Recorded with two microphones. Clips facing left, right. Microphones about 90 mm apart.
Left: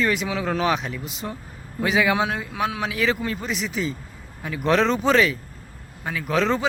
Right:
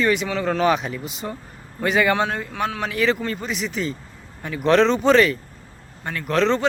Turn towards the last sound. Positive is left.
turn(degrees=5)  # may be behind; listen again after turning